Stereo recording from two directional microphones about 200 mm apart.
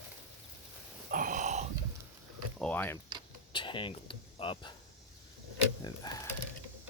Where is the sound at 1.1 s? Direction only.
40° right (ahead or behind).